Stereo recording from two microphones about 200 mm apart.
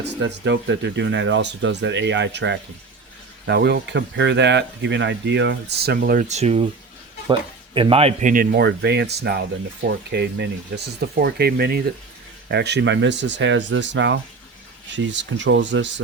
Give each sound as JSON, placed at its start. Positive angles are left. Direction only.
{"t": 0.0, "sound": "speech", "side_deg": -60}